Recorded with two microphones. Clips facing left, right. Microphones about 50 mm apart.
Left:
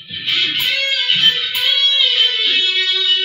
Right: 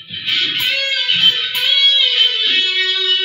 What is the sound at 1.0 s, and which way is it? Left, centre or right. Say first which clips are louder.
Music: right 1 dB; centre.